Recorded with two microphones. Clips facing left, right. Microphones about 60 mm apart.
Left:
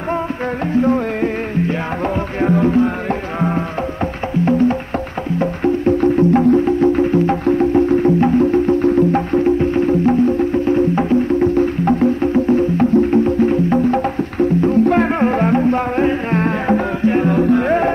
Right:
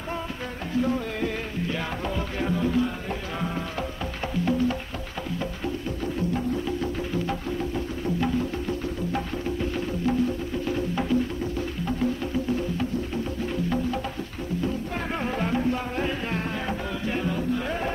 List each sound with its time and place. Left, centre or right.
0.7 s music: left